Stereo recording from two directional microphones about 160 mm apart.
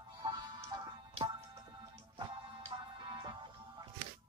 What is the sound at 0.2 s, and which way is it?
Music, 25° right (ahead or behind).